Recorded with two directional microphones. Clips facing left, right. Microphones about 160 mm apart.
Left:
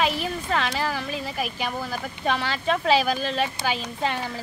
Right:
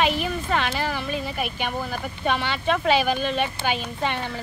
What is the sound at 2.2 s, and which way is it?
Speech, 40° left (ahead or behind).